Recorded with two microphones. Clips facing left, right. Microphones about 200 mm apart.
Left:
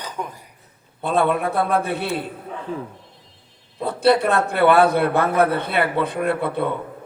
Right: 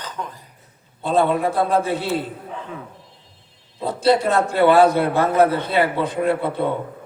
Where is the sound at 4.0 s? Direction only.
60° left (ahead or behind).